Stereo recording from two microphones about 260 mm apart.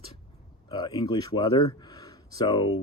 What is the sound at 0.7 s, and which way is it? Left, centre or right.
Speech, centre.